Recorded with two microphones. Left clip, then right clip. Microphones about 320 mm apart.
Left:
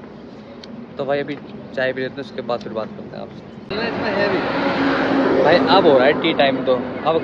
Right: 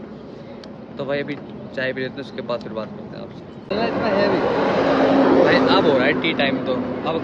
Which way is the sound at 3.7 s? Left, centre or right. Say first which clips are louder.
Right 2 dB; right.